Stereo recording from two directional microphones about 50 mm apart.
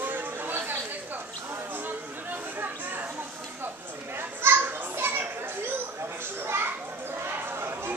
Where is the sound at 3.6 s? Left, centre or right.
Right.